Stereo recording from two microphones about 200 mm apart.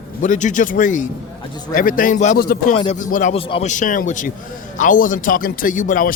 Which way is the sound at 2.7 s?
25° left (ahead or behind).